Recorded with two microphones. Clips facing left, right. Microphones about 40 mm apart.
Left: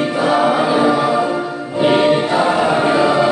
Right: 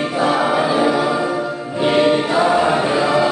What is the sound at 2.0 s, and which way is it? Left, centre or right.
Choir, centre.